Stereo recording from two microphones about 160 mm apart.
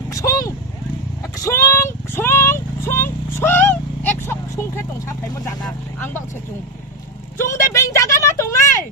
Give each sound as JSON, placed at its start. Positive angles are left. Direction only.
{"t": 0.1, "sound": "vehicle", "side_deg": 20}
{"t": 5.6, "sound": "speech", "side_deg": 10}
{"t": 7.3, "sound": "a sound", "side_deg": 15}